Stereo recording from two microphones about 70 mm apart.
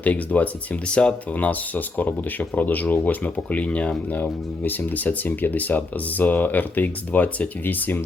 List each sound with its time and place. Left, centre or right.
0.0 s speech: left